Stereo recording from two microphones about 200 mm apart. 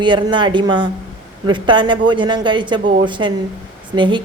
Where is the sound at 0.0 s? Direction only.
25° right (ahead or behind).